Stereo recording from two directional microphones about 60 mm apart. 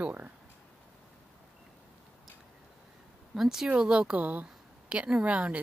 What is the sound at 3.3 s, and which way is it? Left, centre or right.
Speech, centre.